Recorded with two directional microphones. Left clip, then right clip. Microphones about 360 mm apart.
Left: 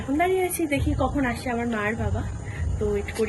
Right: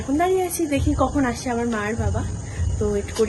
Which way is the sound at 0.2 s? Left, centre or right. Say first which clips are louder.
Right 2 dB; centre.